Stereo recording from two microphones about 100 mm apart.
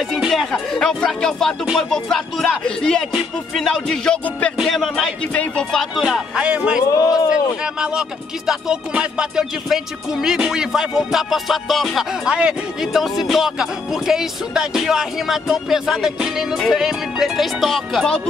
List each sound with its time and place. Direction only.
0.2 s music: centre (ahead or behind)
0.5 s speech: 5° left (ahead or behind)
1.7 s music: centre (ahead or behind)
3.5 s speech: 5° left (ahead or behind)
4.6 s music: centre (ahead or behind)
6.9 s speech: 40° left (ahead or behind)
8.5 s music: 10° right (ahead or behind)